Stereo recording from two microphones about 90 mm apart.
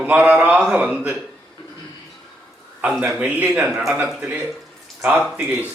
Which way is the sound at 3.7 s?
5° right (ahead or behind).